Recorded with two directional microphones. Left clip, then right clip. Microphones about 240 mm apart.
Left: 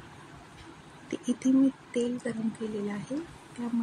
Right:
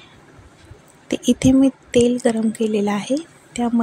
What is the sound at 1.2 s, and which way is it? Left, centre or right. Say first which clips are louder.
Speech: right 10 dB; right.